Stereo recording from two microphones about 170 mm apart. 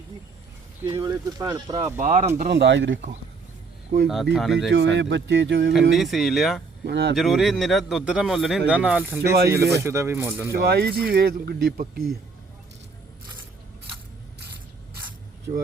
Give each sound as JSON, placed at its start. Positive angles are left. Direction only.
{"t": 0.8, "sound": "speech", "side_deg": -15}
{"t": 2.0, "sound": "speech", "side_deg": -45}
{"t": 2.5, "sound": "speech", "side_deg": -90}
{"t": 4.0, "sound": "speech", "side_deg": 0}
{"t": 4.7, "sound": "speech", "side_deg": -90}
{"t": 5.9, "sound": "speech", "side_deg": 0}
{"t": 6.8, "sound": "speech", "side_deg": -85}
{"t": 7.2, "sound": "speech", "side_deg": 0}
{"t": 10.6, "sound": "speech", "side_deg": -70}